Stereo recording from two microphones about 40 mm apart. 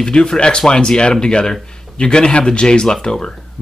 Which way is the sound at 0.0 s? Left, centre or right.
Left.